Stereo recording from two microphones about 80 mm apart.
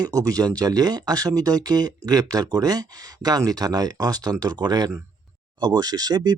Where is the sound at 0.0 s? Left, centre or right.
Right.